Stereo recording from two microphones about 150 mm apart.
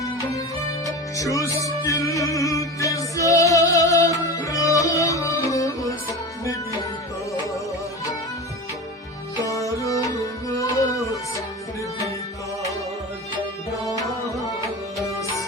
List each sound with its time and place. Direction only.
0.9 s music: 20° left (ahead or behind)
9.5 s tabla: 20° left (ahead or behind)